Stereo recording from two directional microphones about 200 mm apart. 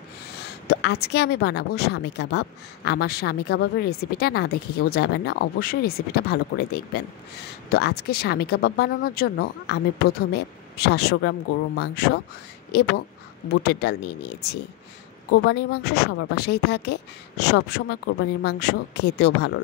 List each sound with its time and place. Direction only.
0.4 s a woman's voice: 55° left (ahead or behind)
13.5 s a woman's voice: 55° left (ahead or behind)